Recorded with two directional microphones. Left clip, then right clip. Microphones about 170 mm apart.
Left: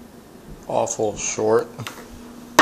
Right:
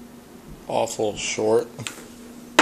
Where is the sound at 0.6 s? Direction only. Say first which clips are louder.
Left 2 dB; 15° right (ahead or behind).